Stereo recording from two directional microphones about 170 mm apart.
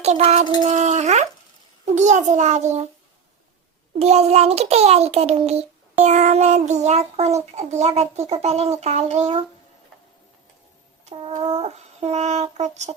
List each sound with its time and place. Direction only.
0.0 s a child's voice: 40° right (ahead or behind)
3.9 s a child's voice: 40° right (ahead or behind)
11.0 s a child's voice: 35° right (ahead or behind)